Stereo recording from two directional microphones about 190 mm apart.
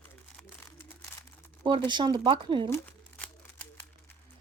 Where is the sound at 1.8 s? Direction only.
25° right (ahead or behind).